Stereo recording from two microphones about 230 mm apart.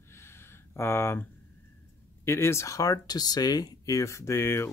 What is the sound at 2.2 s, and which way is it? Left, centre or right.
Speech, centre.